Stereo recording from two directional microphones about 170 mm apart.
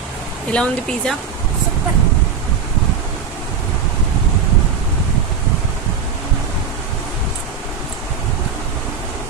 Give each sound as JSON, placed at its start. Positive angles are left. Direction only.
{"t": 0.5, "sound": "speech", "side_deg": 5}